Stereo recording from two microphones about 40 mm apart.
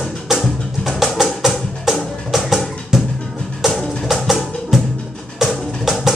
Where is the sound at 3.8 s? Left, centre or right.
Centre.